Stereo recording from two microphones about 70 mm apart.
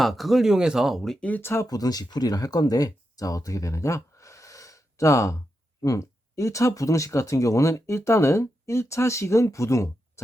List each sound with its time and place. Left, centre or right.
0.0 s speech: centre
1.4 s speech: left
1.6 s speech: left